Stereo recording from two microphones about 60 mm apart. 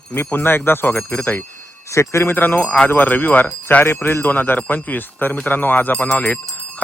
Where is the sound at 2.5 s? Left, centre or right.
Centre.